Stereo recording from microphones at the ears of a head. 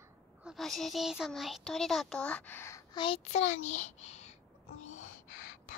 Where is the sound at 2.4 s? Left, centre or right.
Left.